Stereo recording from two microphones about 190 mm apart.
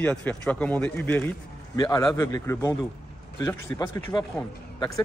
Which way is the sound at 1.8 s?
20° left (ahead or behind).